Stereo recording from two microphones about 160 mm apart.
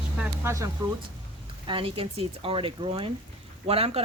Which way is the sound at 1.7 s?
35° right (ahead or behind).